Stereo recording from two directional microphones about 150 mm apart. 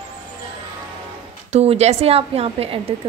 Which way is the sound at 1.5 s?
45° right (ahead or behind).